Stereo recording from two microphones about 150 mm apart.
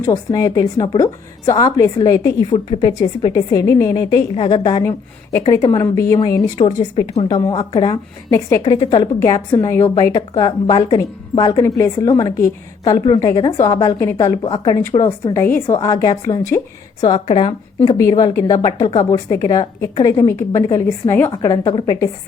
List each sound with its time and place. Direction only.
0.0 s a woman's voice: 25° left (ahead or behind)
4.8 s a woman's voice: 15° left (ahead or behind)
6.9 s a woman's voice: 35° left (ahead or behind)
14.8 s a woman's voice: 15° left (ahead or behind)
17.1 s a woman's voice: 35° left (ahead or behind)
18.1 s a woman's voice: 25° left (ahead or behind)